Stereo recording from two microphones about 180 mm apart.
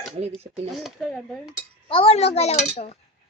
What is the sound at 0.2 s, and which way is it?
Speech, 35° right (ahead or behind).